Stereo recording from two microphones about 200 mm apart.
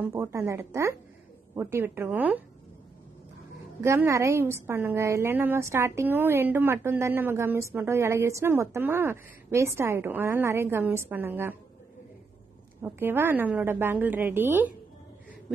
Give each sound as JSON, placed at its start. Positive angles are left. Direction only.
{"t": 0.0, "sound": "a woman's voice", "side_deg": -10}
{"t": 3.8, "sound": "a woman's voice", "side_deg": -15}
{"t": 12.8, "sound": "a woman's voice", "side_deg": -10}